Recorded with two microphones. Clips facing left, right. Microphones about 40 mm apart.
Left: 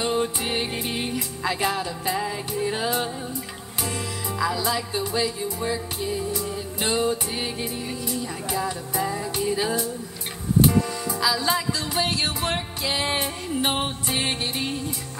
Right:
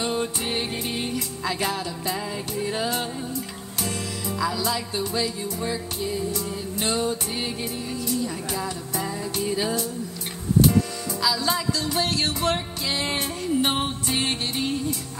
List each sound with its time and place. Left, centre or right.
0.0 s music: centre
4.4 s music: centre